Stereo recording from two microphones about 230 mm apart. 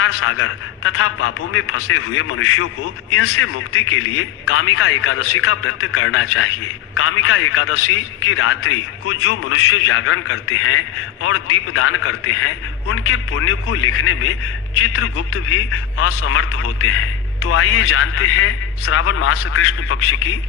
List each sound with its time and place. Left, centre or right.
0.0 s a man's voice: left